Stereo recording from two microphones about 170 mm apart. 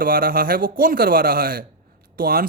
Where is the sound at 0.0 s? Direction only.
60° right (ahead or behind).